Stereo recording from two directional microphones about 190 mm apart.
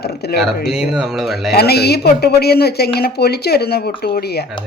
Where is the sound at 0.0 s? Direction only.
60° left (ahead or behind).